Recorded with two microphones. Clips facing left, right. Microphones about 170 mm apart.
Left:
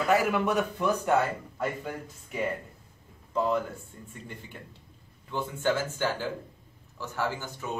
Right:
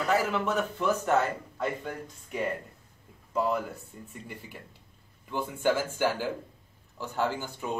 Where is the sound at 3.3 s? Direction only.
5° right (ahead or behind).